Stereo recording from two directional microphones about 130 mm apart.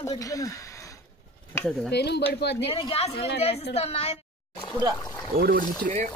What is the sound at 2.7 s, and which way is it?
A woman's voice, 45° left (ahead or behind).